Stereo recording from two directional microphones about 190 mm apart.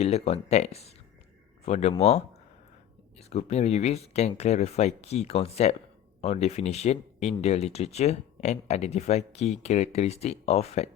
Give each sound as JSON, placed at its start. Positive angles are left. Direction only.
{"t": 0.0, "sound": "speech", "side_deg": 35}